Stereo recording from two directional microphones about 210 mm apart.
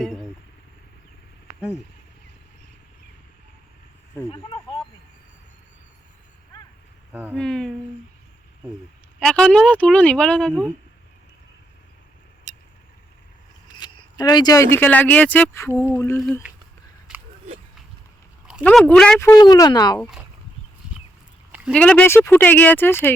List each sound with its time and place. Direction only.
0.0 s a sound: centre (ahead or behind)
4.3 s speech: 25° left (ahead or behind)
7.1 s speech: 10° right (ahead or behind)
7.3 s speech: centre (ahead or behind)
9.2 s speech: 5° left (ahead or behind)
12.5 s vehicle: 35° right (ahead or behind)
13.7 s speech: 20° left (ahead or behind)
17.1 s a sound: 5° right (ahead or behind)
18.6 s speech: 5° left (ahead or behind)
19.3 s speech: 15° left (ahead or behind)
21.5 s a sound: 5° right (ahead or behind)
21.8 s speech: 5° left (ahead or behind)